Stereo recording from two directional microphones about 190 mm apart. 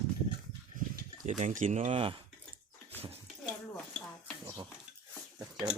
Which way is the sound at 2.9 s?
35° right (ahead or behind).